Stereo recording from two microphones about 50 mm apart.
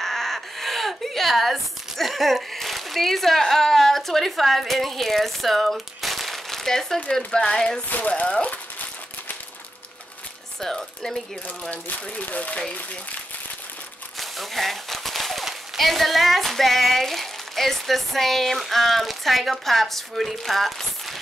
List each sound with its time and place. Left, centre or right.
0.0 s a sound: centre
7.0 s speech: centre
8.2 s a sound: left
10.6 s speech: centre
11.7 s speech: left
14.2 s speech: centre